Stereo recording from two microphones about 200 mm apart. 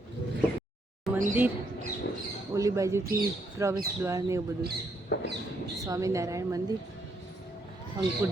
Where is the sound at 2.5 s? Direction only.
15° right (ahead or behind).